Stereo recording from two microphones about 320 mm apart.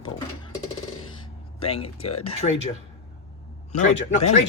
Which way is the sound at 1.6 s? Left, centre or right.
Centre.